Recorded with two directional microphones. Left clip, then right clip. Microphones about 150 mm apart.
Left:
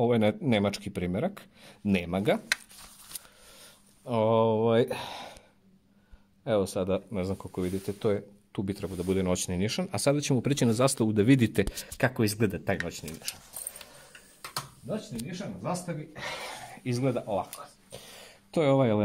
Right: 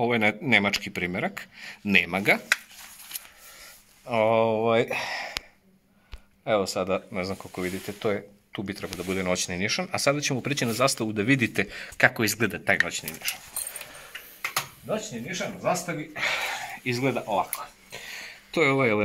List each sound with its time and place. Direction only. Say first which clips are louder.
0.0 s speech: right 2 dB; 90° left
6.4 s speech: right 3 dB; 90° left; by 12.7 s 70° left (ahead or behind)
15.6 s speech: right 7 dB; 65° left (ahead or behind); by 17.5 s 85° left
17.9 s throat clearing: right 9 dB; 90° left